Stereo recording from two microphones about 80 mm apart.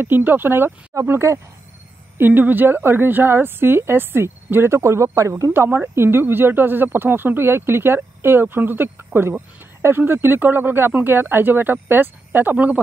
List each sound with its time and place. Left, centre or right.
0.0 s a woman's voice: right